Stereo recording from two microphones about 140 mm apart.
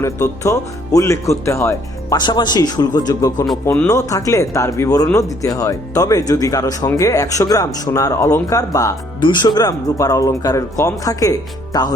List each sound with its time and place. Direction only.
0.0 s speech: 20° left (ahead or behind)